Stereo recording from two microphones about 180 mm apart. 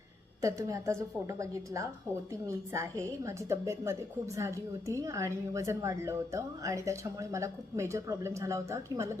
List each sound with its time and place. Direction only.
0.4 s a woman's voice: 15° right (ahead or behind)